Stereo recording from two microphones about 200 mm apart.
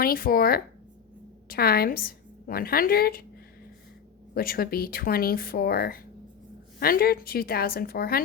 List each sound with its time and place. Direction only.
0.0 s a woman's voice: 45° left (ahead or behind)
4.4 s speech: 50° left (ahead or behind)